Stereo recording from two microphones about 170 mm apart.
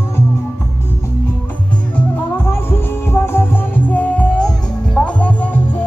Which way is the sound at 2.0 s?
10° left (ahead or behind).